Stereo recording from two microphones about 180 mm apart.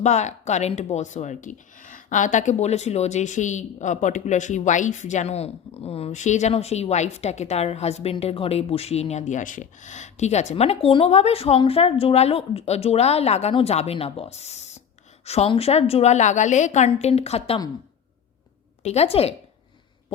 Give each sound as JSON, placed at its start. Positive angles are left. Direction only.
{"t": 0.0, "sound": "speech", "side_deg": 40}
{"t": 18.8, "sound": "speech", "side_deg": 35}